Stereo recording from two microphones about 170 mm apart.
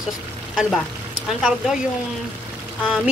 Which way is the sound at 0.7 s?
Centre (ahead or behind).